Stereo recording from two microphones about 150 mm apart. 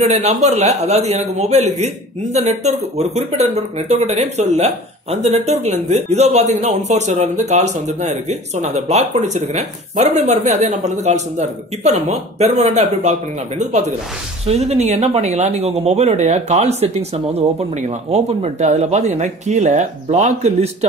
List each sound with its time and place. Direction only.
0.0 s speech: 45° right (ahead or behind)